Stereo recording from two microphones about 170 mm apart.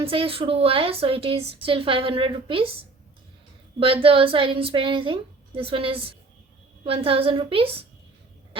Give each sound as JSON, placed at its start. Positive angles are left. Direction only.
{"t": 0.0, "sound": "a woman's voice", "side_deg": -30}
{"t": 4.0, "sound": "a woman's voice", "side_deg": -30}